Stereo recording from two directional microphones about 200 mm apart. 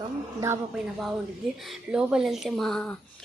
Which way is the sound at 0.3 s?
15° right (ahead or behind).